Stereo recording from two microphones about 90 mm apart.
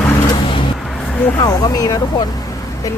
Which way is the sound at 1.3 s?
45° left (ahead or behind).